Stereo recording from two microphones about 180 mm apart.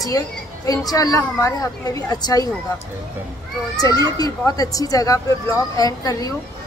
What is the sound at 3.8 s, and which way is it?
A woman's voice, 20° left (ahead or behind).